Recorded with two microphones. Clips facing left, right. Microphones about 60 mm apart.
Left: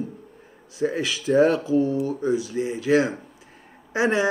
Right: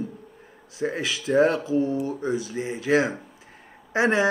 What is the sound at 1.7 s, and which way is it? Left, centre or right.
Speech, right.